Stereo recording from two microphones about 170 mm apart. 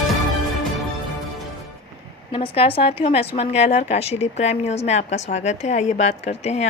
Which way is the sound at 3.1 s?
35° left (ahead or behind).